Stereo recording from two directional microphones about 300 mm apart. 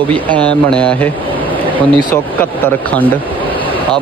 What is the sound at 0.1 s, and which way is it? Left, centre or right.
Speech, centre.